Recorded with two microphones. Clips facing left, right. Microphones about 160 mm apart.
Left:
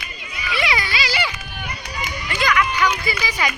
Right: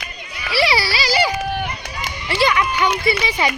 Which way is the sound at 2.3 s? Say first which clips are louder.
Right 3 dB; 30° right (ahead or behind).